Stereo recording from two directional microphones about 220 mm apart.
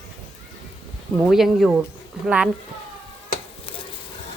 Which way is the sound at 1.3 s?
Centre (ahead or behind).